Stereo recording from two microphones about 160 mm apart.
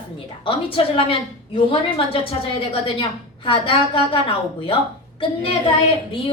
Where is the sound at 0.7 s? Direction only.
35° left (ahead or behind).